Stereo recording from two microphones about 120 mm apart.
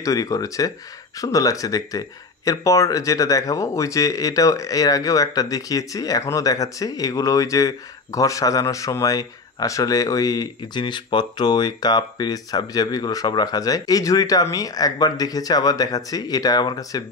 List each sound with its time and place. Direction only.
0.0 s speech: 30° left (ahead or behind)